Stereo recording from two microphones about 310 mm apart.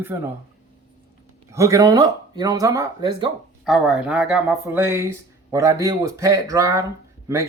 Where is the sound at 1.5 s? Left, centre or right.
Centre.